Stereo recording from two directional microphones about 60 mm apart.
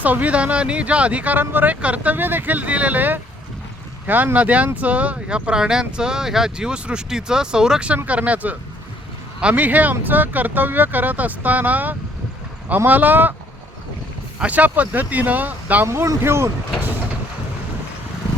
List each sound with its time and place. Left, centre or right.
0.0 s speech: right
14.3 s speech: right
16.2 s speech: right